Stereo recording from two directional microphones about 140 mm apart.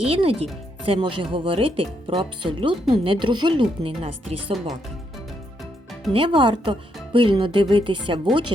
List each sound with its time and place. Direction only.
0.0 s speech: 45° right (ahead or behind)
6.1 s speech: 35° right (ahead or behind)